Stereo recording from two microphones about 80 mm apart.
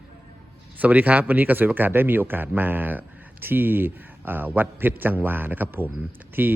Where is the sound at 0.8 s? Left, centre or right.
Right.